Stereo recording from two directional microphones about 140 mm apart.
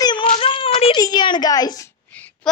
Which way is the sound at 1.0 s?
30° left (ahead or behind).